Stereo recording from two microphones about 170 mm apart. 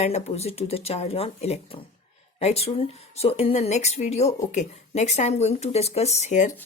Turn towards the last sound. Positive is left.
turn(degrees=45)  # may be behind; listen again after turning